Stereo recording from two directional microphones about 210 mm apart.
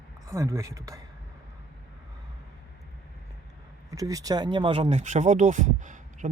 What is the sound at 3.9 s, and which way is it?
Speech, 15° right (ahead or behind).